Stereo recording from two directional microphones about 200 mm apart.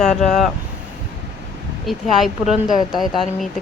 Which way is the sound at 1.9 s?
Centre (ahead or behind).